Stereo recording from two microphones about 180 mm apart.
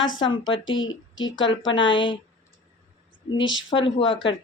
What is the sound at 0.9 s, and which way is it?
Speech, 90° left.